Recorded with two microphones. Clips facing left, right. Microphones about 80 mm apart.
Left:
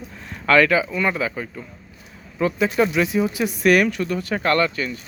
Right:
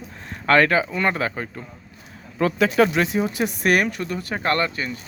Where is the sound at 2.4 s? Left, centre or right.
Right.